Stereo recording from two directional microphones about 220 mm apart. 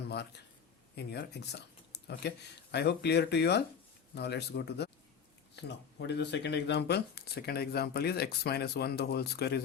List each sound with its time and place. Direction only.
0.9 s speech: 50° left (ahead or behind)